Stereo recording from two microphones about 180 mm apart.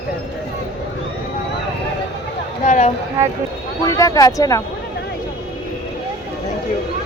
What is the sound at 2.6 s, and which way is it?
Speech, 40° left (ahead or behind).